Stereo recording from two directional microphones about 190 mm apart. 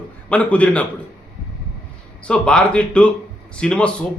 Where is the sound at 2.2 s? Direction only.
5° left (ahead or behind).